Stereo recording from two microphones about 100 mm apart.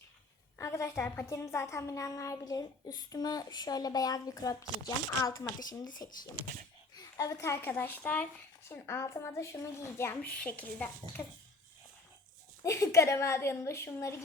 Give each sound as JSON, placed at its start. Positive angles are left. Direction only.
{"t": 0.6, "sound": "a woman's voice", "side_deg": 30}
{"t": 6.9, "sound": "a sound", "side_deg": 35}
{"t": 7.6, "sound": "a woman's voice", "side_deg": 20}
{"t": 10.2, "sound": "a woman's voice", "side_deg": 10}
{"t": 11.2, "sound": "a woman's voice", "side_deg": 20}
{"t": 12.6, "sound": "a woman's voice", "side_deg": 30}